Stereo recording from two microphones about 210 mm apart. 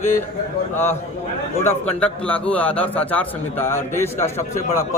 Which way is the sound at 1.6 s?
10° left (ahead or behind).